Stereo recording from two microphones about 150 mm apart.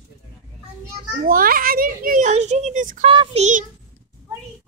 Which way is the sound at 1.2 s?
70° right (ahead or behind).